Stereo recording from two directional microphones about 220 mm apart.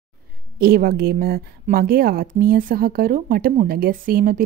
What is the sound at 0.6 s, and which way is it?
Speech, 45° right (ahead or behind).